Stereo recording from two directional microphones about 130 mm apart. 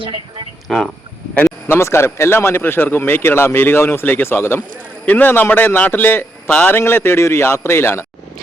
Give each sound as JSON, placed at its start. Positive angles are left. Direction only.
{"t": 0.0, "sound": "speech", "side_deg": -45}
{"t": 0.7, "sound": "speech", "side_deg": 0}
{"t": 1.6, "sound": "a man's voice", "side_deg": 20}